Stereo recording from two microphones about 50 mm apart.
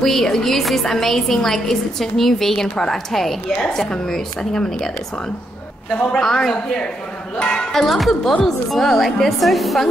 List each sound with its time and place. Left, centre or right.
0.0 s a woman's voice: centre
7.8 s a woman's voice: centre